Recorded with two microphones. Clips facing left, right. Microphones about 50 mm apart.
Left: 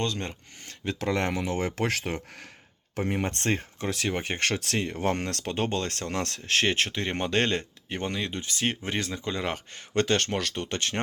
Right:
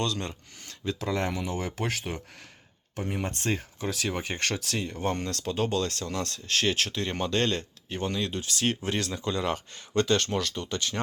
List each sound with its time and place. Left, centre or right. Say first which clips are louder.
0.0 s speech: even; left
0.9 s speech: left 2 dB; left
3.8 s speech: left 2 dB; left
4.6 s speech: left 3 dB; left
6.7 s speech: left 1 dB; left
9.4 s speech: right 2 dB; left